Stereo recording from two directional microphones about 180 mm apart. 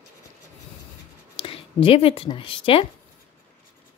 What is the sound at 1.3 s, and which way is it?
Speech, 30° left (ahead or behind).